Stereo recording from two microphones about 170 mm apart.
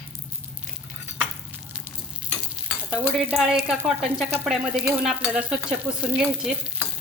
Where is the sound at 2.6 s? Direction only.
5° right (ahead or behind).